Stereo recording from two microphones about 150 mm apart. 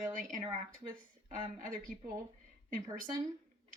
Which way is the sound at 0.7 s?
65° right (ahead or behind).